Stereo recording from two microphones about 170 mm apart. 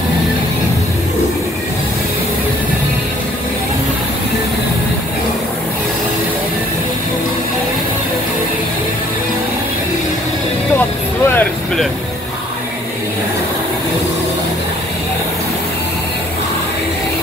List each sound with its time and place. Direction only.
11.3 s vehicle: 5° left (ahead or behind)